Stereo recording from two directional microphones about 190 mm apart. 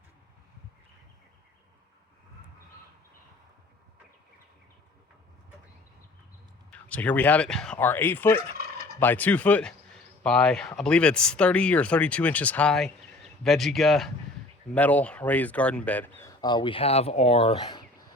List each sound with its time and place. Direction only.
6.7 s speech: 5° left (ahead or behind); by 17.8 s 25° left (ahead or behind)